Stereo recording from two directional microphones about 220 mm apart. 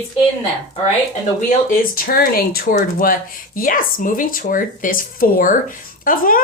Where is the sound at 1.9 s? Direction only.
40° left (ahead or behind).